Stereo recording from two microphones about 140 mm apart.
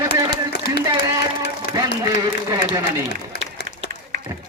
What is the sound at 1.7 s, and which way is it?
Speech, 30° right (ahead or behind).